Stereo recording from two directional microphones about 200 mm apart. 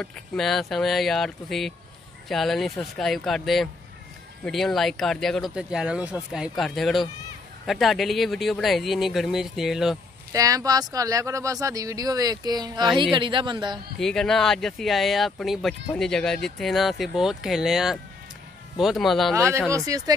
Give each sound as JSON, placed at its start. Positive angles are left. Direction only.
{"t": 0.0, "sound": "speech", "side_deg": 0}
{"t": 10.3, "sound": "a woman's voice", "side_deg": -15}
{"t": 13.9, "sound": "speech", "side_deg": 0}
{"t": 19.7, "sound": "speech", "side_deg": -15}